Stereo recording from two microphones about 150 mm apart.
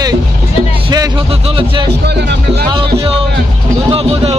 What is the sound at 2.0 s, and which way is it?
Speech, 90° right.